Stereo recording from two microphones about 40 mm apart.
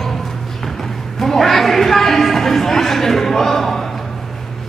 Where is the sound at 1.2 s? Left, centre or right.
Centre.